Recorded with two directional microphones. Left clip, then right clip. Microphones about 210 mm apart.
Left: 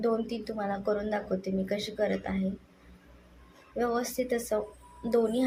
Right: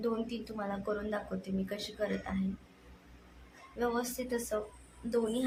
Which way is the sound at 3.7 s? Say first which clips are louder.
Left 5 dB; 20° left (ahead or behind).